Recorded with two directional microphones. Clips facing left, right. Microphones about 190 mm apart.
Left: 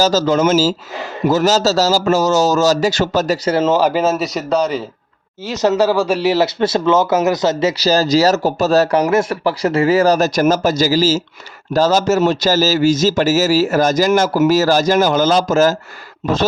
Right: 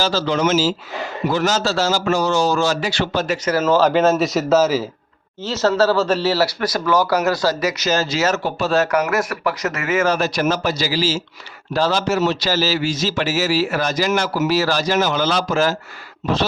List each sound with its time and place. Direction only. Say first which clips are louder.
0.0 s a man's voice: left 5 dB; 40° left (ahead or behind); by 3.8 s 25° left (ahead or behind)
3.8 s speech: even; 10° left (ahead or behind)
5.5 s a man's voice: left 2 dB; 15° left (ahead or behind); by 15.7 s 45° left (ahead or behind)
16.2 s speech: left 3 dB; 55° left (ahead or behind)